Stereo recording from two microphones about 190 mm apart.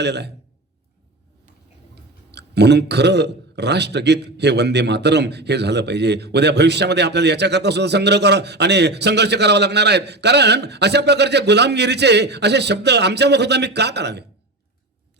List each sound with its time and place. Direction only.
0.0 s a man's voice: 60° right (ahead or behind)
2.3 s a man's voice: 60° right (ahead or behind)